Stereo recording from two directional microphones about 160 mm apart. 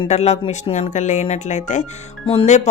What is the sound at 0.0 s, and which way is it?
Speech, 40° left (ahead or behind).